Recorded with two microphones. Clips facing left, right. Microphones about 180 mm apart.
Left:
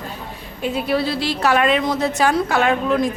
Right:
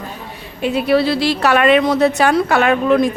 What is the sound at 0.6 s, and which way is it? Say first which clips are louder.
A woman's voice: right 5 dB; 75° right (ahead or behind).